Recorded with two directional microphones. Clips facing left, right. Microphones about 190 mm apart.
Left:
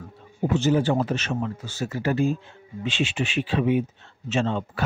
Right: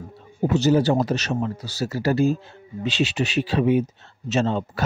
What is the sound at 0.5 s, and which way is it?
A man's voice, 40° right (ahead or behind).